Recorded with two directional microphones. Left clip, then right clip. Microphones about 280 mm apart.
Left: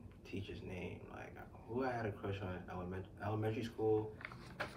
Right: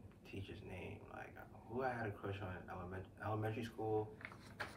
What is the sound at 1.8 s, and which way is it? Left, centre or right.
A man's voice, centre.